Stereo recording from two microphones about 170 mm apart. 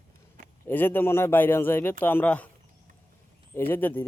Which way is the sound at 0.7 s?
10° left (ahead or behind).